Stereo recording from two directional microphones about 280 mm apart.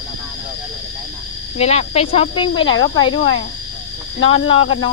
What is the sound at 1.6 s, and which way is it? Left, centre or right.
Speech, left.